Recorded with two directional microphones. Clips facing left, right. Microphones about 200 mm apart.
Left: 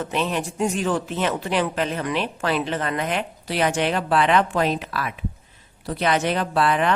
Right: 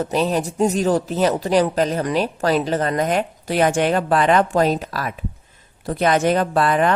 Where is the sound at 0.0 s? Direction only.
40° right (ahead or behind).